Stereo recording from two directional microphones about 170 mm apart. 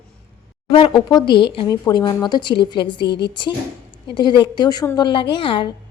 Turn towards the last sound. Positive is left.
turn(degrees=30)  # may be behind; listen again after turning